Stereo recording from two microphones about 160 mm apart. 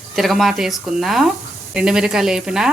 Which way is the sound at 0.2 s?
Centre (ahead or behind).